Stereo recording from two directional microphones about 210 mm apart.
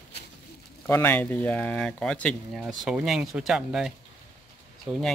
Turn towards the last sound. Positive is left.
turn(degrees=0)  # may be behind; listen again after turning